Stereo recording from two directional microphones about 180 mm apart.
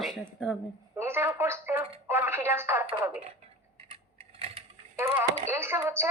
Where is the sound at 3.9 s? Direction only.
35° right (ahead or behind).